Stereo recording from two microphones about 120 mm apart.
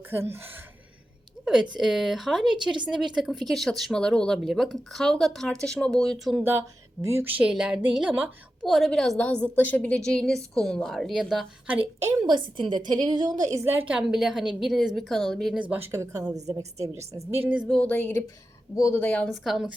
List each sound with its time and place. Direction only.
0.1 s speech: 20° right (ahead or behind)
1.8 s speech: 5° right (ahead or behind)
6.4 s a woman's voice: 20° right (ahead or behind); by 11.7 s centre (ahead or behind)
12.0 s a woman's voice: 35° right (ahead or behind); by 15.5 s 5° left (ahead or behind)
15.5 s a woman's voice: 10° right (ahead or behind)
15.9 s speech: 30° right (ahead or behind)
17.7 s speech: 10° left (ahead or behind)
18.8 s speech: 25° left (ahead or behind)
19.0 s speech: 10° left (ahead or behind)
19.3 s speech: centre (ahead or behind)